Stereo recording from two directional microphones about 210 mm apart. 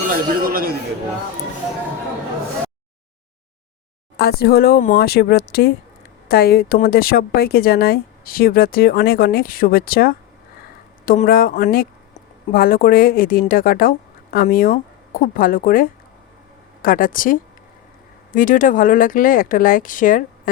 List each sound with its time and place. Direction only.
0.1 s a man's voice: 45° right (ahead or behind)
4.2 s speech: 50° left (ahead or behind)